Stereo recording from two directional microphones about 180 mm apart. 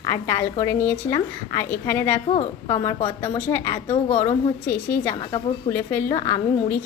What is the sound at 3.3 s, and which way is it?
Speech, 10° left (ahead or behind).